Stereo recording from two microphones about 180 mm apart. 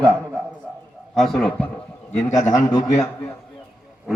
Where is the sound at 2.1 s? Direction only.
15° left (ahead or behind).